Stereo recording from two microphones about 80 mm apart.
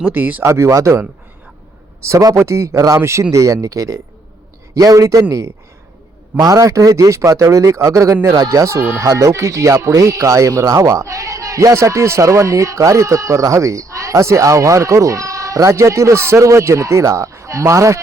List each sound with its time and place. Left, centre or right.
0.0 s speech: right
0.4 s speech: right
2.0 s speech: right
6.4 s speech: right